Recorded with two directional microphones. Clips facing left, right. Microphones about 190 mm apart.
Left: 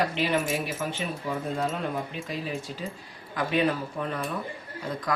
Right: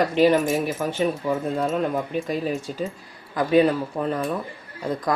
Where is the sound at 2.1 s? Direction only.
50° right (ahead or behind).